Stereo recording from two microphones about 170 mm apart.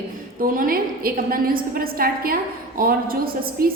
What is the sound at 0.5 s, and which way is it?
A woman's voice, 55° right (ahead or behind).